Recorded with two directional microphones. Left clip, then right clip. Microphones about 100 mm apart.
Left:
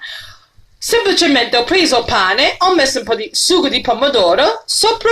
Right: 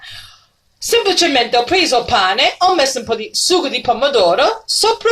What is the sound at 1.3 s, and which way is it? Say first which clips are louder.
Speech: left 1 dB; 25° left (ahead or behind).